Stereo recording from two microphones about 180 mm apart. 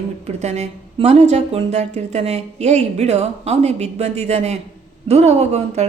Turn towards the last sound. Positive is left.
turn(degrees=-35)  # may be behind; listen again after turning